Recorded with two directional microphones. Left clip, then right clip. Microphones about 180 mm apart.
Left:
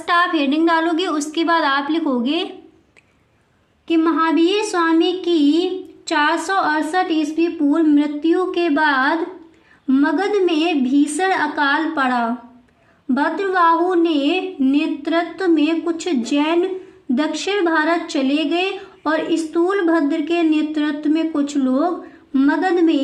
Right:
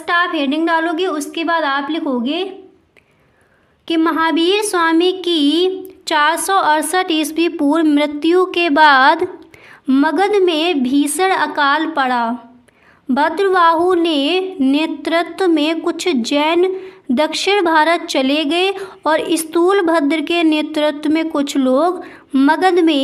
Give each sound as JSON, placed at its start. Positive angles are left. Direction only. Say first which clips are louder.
{"t": 0.0, "sound": "a woman's voice", "louder": "right 1 dB", "side_deg": -20}
{"t": 3.8, "sound": "a woman's voice", "louder": "right 2 dB", "side_deg": -40}
{"t": 9.8, "sound": "a woman's voice", "louder": "right 3 dB", "side_deg": -55}